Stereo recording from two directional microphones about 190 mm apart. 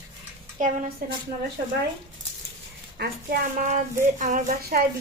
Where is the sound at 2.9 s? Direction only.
55° right (ahead or behind).